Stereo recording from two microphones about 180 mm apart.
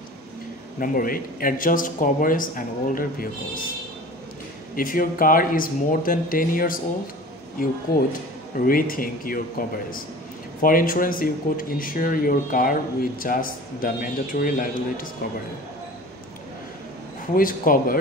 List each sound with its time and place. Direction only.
0.7 s speech: 50° left (ahead or behind)
4.7 s speech: 50° left (ahead or behind)
17.3 s speech: 50° left (ahead or behind)